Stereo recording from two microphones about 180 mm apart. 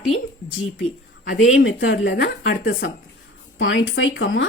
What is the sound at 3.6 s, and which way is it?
Speech, 90° left.